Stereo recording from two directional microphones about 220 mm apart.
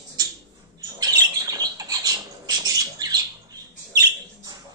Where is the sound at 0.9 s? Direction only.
15° right (ahead or behind).